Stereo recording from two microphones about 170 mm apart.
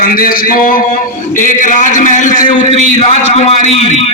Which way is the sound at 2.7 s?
35° left (ahead or behind).